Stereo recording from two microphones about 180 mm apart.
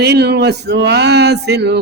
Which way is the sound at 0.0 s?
65° right (ahead or behind).